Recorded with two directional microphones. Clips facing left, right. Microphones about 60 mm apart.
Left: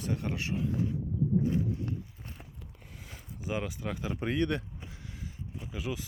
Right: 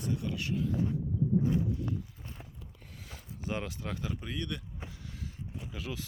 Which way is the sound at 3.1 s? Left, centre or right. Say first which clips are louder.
Left 1 dB; centre.